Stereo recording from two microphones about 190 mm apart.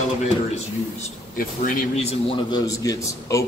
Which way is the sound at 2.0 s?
30° left (ahead or behind).